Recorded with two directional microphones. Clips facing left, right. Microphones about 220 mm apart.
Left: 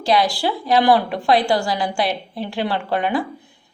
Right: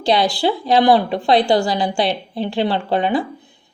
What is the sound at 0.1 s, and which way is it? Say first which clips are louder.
A woman's voice: right 2 dB; 25° right (ahead or behind).